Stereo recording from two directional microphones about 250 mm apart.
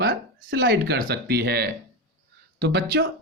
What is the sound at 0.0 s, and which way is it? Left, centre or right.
Speech, right.